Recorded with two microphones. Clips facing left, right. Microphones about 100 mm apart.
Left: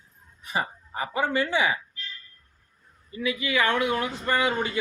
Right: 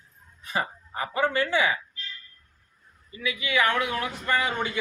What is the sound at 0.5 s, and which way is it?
Speech, 20° left (ahead or behind).